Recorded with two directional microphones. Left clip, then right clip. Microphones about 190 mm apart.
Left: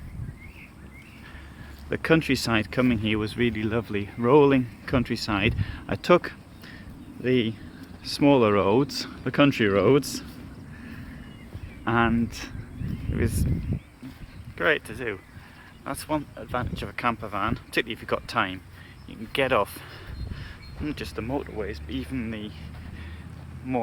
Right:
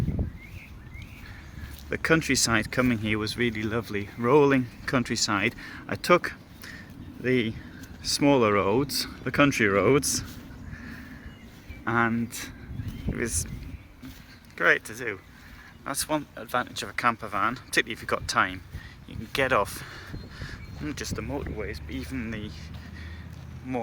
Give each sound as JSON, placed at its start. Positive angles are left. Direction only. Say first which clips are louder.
{"t": 1.9, "sound": "speech", "louder": "left 1 dB", "side_deg": 20}
{"t": 11.9, "sound": "speech", "louder": "left 2 dB", "side_deg": 20}
{"t": 14.6, "sound": "speech", "louder": "right 1 dB", "side_deg": 15}
{"t": 15.9, "sound": "speech", "louder": "even", "side_deg": 5}
{"t": 23.6, "sound": "speech", "louder": "left 4 dB", "side_deg": 25}